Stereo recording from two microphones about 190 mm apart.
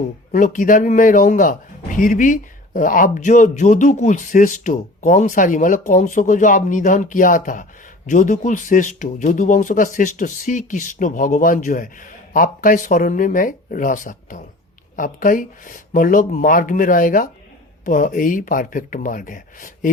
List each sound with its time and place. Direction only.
0.3 s a man's voice: 45° left (ahead or behind)